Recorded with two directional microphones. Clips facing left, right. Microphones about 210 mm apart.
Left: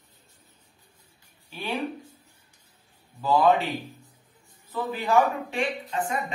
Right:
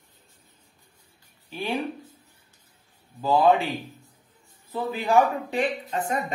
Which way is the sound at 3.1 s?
15° right (ahead or behind).